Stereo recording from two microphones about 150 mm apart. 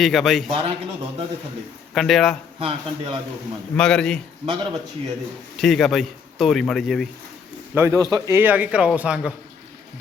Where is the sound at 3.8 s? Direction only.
5° left (ahead or behind).